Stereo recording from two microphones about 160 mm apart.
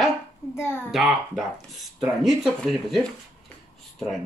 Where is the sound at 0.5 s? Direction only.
15° left (ahead or behind).